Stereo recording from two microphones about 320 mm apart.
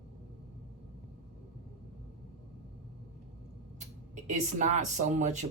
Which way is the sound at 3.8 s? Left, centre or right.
Right.